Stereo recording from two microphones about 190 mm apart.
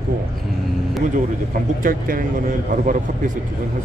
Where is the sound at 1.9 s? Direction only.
45° right (ahead or behind).